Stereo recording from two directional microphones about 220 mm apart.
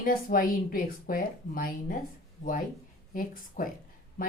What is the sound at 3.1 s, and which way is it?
Speech, 40° left (ahead or behind).